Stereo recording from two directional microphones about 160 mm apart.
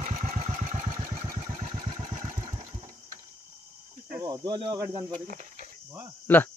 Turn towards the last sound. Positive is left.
turn(degrees=10)  # may be behind; listen again after turning